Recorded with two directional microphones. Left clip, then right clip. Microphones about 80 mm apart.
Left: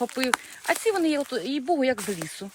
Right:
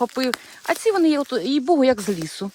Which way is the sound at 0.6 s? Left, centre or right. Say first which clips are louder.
Right 7 dB; right.